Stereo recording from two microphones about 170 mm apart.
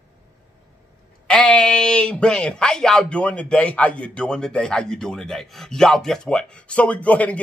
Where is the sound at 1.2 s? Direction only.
5° left (ahead or behind).